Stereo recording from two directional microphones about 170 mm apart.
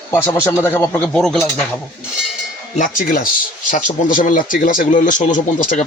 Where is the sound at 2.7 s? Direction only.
50° left (ahead or behind).